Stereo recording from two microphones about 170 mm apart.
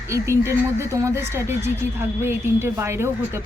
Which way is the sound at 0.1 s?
15° right (ahead or behind).